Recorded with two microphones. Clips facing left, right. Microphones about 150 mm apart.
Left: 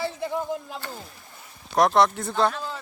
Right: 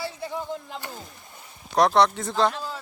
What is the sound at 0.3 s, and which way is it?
Speech, 45° left (ahead or behind).